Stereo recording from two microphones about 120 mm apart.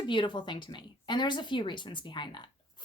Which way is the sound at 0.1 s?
40° left (ahead or behind).